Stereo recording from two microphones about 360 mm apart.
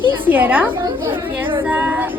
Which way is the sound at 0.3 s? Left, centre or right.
Centre.